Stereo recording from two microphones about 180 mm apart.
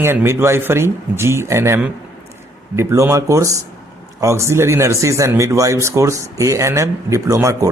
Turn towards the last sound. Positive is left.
turn(degrees=-15)  # may be behind; listen again after turning